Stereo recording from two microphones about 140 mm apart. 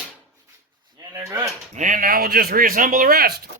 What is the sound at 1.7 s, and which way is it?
Speech, 65° right (ahead or behind).